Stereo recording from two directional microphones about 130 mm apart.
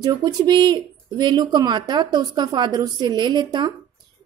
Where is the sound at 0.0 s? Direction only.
30° right (ahead or behind).